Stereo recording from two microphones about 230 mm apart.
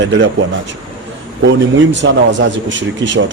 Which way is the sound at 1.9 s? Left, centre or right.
Right.